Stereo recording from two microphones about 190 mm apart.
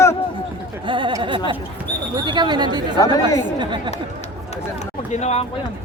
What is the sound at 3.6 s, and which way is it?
Speech, 25° right (ahead or behind).